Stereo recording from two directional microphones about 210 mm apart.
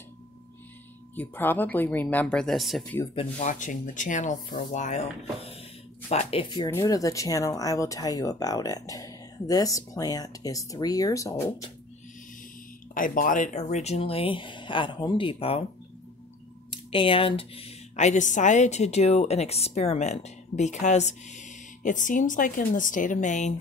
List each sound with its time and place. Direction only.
1.1 s speech: 10° left (ahead or behind)
3.2 s a woman's voice: 35° left (ahead or behind)
6.0 s speech: 30° left (ahead or behind)
12.9 s speech: 40° left (ahead or behind)
16.9 s a woman's voice: 25° left (ahead or behind)